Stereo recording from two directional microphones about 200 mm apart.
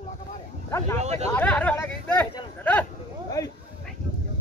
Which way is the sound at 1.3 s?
5° left (ahead or behind).